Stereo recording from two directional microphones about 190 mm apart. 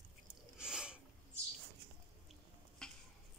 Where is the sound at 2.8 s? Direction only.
5° left (ahead or behind).